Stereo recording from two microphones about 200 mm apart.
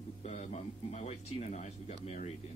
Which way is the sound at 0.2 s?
35° left (ahead or behind).